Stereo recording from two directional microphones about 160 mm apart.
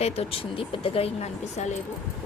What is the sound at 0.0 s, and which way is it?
Speech, 40° left (ahead or behind).